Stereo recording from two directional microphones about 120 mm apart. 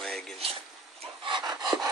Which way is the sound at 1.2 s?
40° right (ahead or behind).